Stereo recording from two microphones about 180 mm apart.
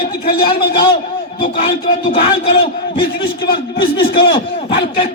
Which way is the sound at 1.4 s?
30° left (ahead or behind).